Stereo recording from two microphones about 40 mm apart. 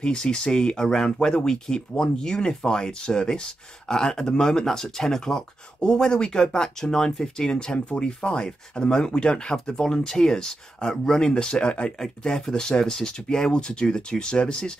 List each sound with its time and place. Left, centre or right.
0.0 s speech: left